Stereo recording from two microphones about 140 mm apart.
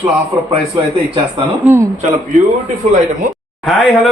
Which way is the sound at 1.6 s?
15° right (ahead or behind).